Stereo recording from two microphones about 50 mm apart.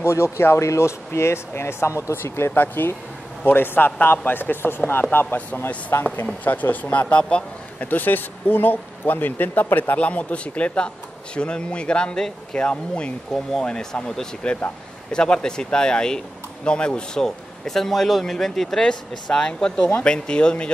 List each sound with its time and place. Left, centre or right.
0.0 s speech: left
2.5 s a man's voice: left
5.9 s speech: left
6.4 s speech: left
7.9 s speech: left
9.9 s speech: left
13.3 s a man's voice: centre